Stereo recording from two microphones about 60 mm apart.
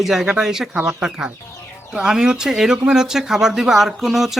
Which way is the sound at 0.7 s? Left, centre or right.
Centre.